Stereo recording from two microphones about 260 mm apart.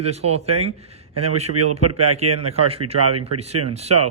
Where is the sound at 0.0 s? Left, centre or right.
Right.